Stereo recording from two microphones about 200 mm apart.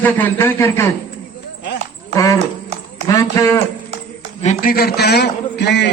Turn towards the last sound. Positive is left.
turn(degrees=60)  # may be behind; listen again after turning